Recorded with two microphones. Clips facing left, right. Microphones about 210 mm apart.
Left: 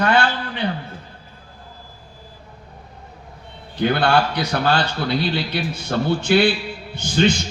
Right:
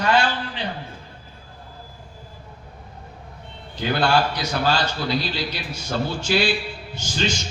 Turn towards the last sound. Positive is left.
turn(degrees=60)  # may be behind; listen again after turning